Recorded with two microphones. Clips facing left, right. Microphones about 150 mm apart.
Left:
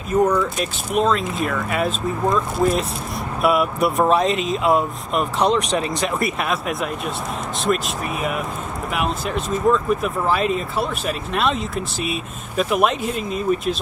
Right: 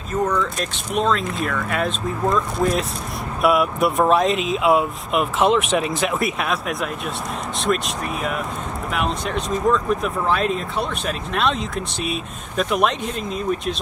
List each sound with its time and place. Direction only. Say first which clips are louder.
0.1 s speech: left 4 dB; 10° left (ahead or behind)